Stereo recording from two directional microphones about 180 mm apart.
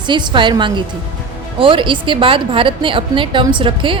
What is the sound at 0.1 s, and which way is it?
A woman's voice, 25° right (ahead or behind).